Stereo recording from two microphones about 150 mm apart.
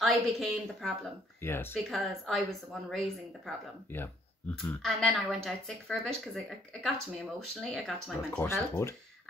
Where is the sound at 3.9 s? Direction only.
15° left (ahead or behind).